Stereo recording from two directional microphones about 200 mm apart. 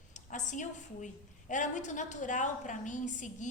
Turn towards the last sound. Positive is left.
turn(degrees=40)  # may be behind; listen again after turning